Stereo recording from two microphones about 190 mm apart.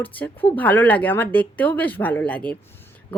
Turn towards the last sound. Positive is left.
turn(degrees=10)  # may be behind; listen again after turning